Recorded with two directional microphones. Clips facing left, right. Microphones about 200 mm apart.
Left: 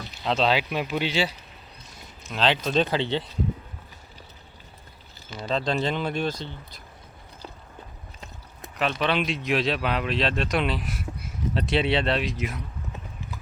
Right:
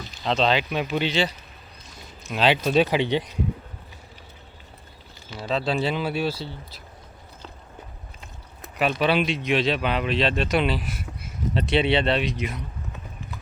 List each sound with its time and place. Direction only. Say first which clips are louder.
0.3 s speech: right 1 dB; 5° left (ahead or behind)
2.3 s speech: right 3 dB; 10° right (ahead or behind)
5.4 s speech: right 1 dB; 5° right (ahead or behind)
8.8 s speech: right 3 dB; 10° right (ahead or behind)